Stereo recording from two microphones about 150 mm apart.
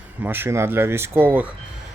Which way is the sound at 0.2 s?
15° right (ahead or behind).